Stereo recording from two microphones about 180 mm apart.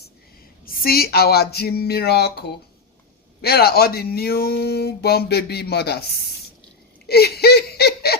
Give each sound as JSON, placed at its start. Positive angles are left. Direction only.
{"t": 0.6, "sound": "speech", "side_deg": 55}
{"t": 7.1, "sound": "laughter", "side_deg": 60}